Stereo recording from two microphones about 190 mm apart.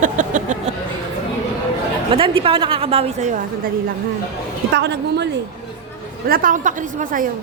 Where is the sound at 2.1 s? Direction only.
30° right (ahead or behind).